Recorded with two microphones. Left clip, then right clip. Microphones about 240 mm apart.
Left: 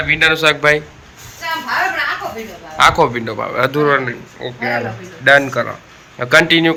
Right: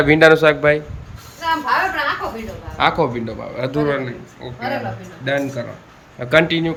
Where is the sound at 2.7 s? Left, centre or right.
Centre.